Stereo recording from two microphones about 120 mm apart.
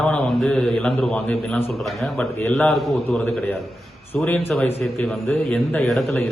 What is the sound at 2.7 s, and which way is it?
A man's voice, centre (ahead or behind).